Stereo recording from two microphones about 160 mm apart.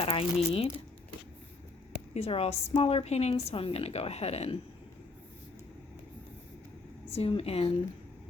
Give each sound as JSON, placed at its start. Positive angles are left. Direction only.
{"t": 0.0, "sound": "speech", "side_deg": 35}
{"t": 2.1, "sound": "speech", "side_deg": 40}
{"t": 7.2, "sound": "speech", "side_deg": 35}